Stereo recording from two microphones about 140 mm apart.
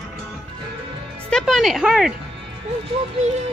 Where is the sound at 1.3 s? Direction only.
Centre (ahead or behind).